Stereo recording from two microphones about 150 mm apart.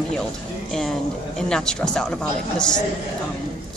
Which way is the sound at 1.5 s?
5° left (ahead or behind).